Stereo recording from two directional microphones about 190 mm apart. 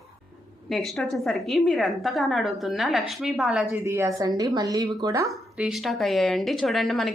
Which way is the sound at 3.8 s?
15° right (ahead or behind).